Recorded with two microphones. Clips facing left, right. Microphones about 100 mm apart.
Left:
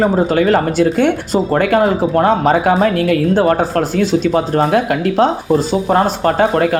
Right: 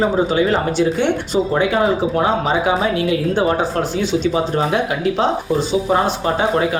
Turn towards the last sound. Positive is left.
turn(degrees=55)  # may be behind; listen again after turning